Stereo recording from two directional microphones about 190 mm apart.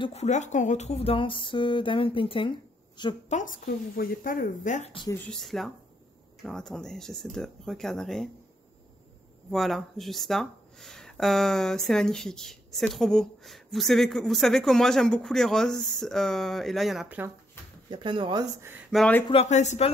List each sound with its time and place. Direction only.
0.0 s speech: 35° left (ahead or behind)
3.3 s a woman's voice: 45° left (ahead or behind)
5.1 s speech: 5° left (ahead or behind)
9.5 s speech: centre (ahead or behind)
17.8 s speech: 25° right (ahead or behind)
18.9 s speech: 5° left (ahead or behind)
19.2 s speech: 35° left (ahead or behind)